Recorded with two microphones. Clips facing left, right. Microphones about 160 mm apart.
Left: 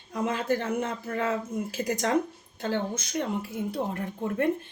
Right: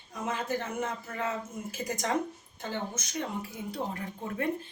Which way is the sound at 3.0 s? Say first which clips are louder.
Left 5 dB; 60° left (ahead or behind).